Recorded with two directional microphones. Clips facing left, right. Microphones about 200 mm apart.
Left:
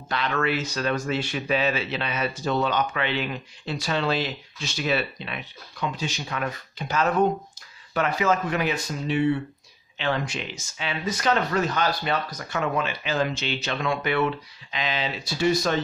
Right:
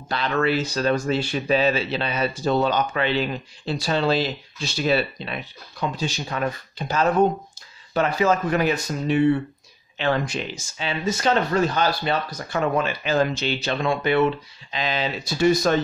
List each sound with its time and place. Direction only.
0.1 s speech: 30° right (ahead or behind)